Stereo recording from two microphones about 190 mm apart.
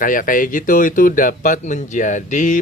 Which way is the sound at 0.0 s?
45° left (ahead or behind).